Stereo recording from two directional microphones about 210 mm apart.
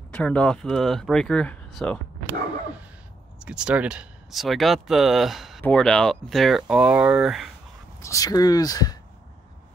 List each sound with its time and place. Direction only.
0.1 s speech: 5° left (ahead or behind)
3.3 s speech: 5° right (ahead or behind)
8.0 s speech: 15° left (ahead or behind)